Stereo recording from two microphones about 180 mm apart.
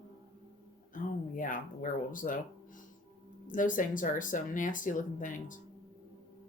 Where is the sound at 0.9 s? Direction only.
50° left (ahead or behind).